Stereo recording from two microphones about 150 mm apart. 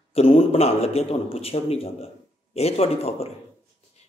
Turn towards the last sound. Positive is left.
turn(degrees=40)  # may be behind; listen again after turning